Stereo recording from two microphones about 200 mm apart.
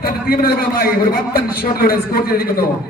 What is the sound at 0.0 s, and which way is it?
A man's voice, 50° left (ahead or behind).